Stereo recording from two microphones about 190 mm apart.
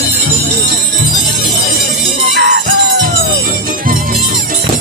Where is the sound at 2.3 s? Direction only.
60° right (ahead or behind).